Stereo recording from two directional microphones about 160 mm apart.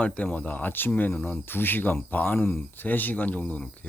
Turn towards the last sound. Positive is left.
turn(degrees=10)  # may be behind; listen again after turning